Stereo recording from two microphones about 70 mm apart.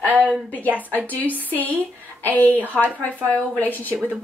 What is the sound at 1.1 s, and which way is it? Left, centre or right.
A woman's voice, left.